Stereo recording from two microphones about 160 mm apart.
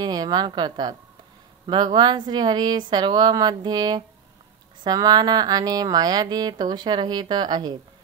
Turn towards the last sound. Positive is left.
turn(degrees=-25)  # may be behind; listen again after turning